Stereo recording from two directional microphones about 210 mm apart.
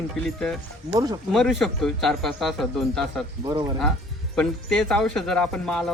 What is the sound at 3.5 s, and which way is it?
Speech, 20° right (ahead or behind).